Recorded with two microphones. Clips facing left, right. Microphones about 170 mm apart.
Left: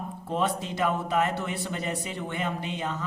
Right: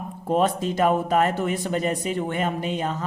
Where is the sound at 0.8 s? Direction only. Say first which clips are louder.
Right 6 dB; 45° right (ahead or behind).